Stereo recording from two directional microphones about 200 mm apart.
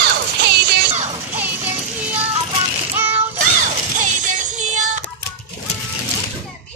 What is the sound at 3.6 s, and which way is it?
Music, 40° right (ahead or behind).